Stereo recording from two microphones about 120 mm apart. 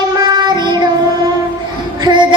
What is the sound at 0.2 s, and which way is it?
Child singing, 35° right (ahead or behind).